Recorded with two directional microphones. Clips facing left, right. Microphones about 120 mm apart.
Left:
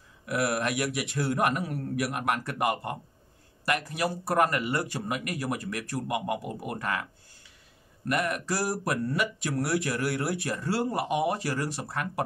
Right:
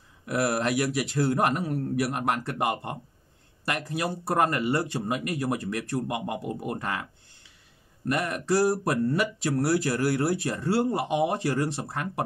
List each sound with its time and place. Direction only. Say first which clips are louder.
0.3 s a man's voice: right 2 dB; 30° right (ahead or behind)
8.1 s speech: right 3 dB; 30° right (ahead or behind)